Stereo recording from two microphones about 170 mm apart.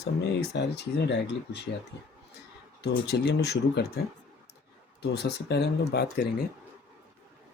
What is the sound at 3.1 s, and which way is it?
Speech, 80° left.